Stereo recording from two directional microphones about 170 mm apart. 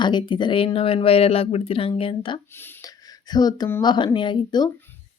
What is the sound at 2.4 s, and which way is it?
Speech, 15° left (ahead or behind).